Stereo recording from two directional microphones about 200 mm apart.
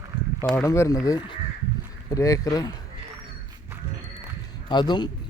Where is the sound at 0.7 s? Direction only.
15° left (ahead or behind).